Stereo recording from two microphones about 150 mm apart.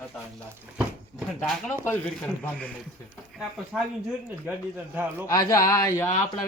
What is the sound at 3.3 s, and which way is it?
Speech, 5° right (ahead or behind).